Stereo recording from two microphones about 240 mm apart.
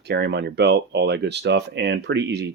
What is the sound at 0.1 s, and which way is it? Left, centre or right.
Speech, right.